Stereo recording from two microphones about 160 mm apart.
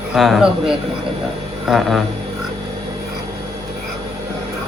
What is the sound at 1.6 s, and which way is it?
Speech, centre (ahead or behind).